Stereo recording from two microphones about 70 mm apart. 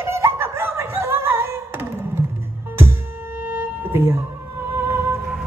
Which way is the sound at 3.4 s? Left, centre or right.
Right.